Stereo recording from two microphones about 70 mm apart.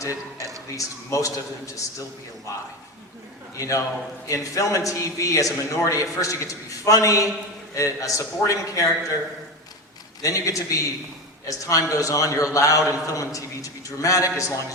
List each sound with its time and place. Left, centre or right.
0.3 s speech: right
0.8 s a man's voice: left
10.2 s a man's voice: left